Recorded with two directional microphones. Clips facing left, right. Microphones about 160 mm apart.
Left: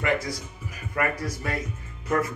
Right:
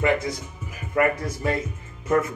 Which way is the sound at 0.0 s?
20° right (ahead or behind).